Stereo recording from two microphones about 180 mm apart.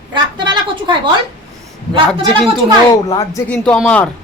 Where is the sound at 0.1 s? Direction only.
25° right (ahead or behind).